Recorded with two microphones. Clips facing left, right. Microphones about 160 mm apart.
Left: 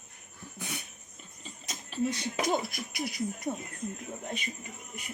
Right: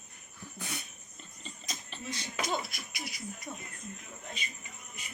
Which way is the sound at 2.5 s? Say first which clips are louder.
Left 6 dB; 50° left (ahead or behind).